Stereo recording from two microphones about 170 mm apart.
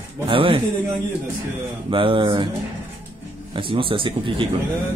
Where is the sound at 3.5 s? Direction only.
30° right (ahead or behind).